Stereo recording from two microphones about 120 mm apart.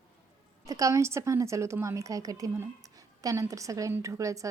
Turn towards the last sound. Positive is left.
turn(degrees=-25)  # may be behind; listen again after turning